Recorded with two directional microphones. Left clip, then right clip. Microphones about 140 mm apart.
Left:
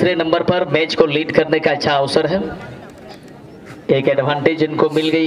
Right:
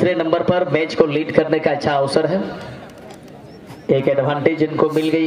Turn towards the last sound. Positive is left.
turn(degrees=25)  # may be behind; listen again after turning